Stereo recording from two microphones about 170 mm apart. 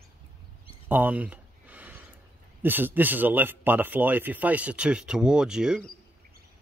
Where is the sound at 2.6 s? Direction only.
10° right (ahead or behind).